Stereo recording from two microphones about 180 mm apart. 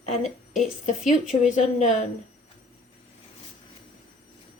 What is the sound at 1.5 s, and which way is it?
Speech, 40° left (ahead or behind).